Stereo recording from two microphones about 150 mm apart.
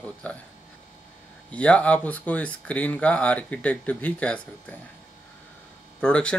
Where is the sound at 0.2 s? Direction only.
10° left (ahead or behind).